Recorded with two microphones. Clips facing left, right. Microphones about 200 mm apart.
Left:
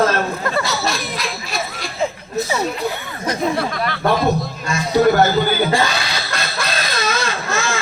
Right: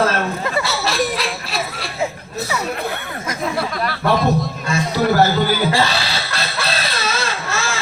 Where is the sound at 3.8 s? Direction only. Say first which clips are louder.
Right 2 dB; centre (ahead or behind).